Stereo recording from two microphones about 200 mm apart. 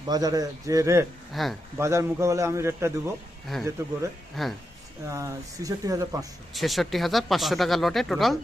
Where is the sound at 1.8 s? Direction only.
15° right (ahead or behind).